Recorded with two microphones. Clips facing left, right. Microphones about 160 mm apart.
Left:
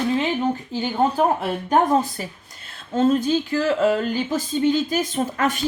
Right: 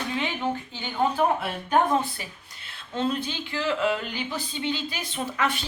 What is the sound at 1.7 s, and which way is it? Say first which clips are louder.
A woman's voice: left 4 dB; 40° left (ahead or behind).